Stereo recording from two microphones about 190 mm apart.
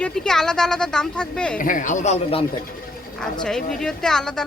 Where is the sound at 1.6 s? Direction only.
45° left (ahead or behind).